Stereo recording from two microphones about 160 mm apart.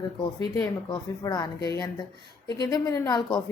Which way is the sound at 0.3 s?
20° left (ahead or behind).